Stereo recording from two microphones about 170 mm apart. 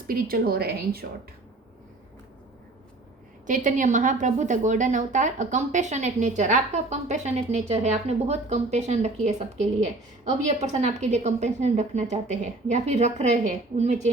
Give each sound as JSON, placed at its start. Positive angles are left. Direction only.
{"t": 0.1, "sound": "a woman's voice", "side_deg": -60}
{"t": 3.4, "sound": "a woman's voice", "side_deg": -50}